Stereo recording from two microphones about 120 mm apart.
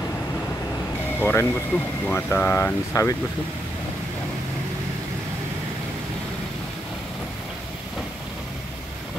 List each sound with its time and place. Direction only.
1.2 s speech: 20° left (ahead or behind)